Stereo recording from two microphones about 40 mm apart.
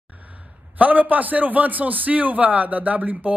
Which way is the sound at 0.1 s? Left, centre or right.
Right.